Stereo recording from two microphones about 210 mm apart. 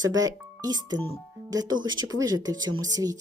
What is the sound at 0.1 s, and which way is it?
Speech, 15° right (ahead or behind).